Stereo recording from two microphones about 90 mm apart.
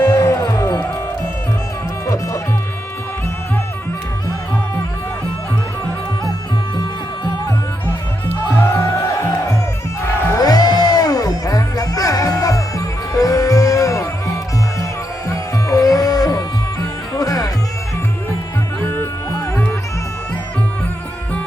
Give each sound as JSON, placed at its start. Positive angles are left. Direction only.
{"t": 0.0, "sound": "music", "side_deg": 40}
{"t": 2.0, "sound": "music", "side_deg": 35}
{"t": 7.9, "sound": "music", "side_deg": 25}
{"t": 10.3, "sound": "music", "side_deg": 45}
{"t": 18.8, "sound": "music", "side_deg": 25}